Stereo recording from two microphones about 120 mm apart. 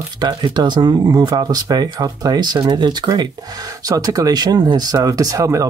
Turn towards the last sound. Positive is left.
turn(degrees=-25)  # may be behind; listen again after turning